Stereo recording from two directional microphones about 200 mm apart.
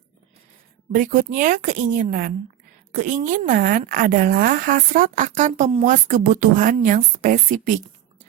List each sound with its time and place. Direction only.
0.9 s a woman's voice: 40° right (ahead or behind)